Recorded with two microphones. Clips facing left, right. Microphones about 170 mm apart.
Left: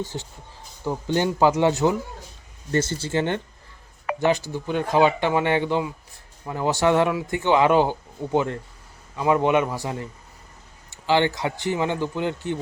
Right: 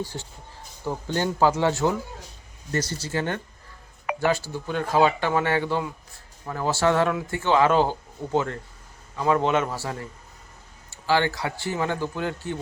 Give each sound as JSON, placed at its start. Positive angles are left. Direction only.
{"t": 0.0, "sound": "speech", "side_deg": 20}
{"t": 2.7, "sound": "speech", "side_deg": 25}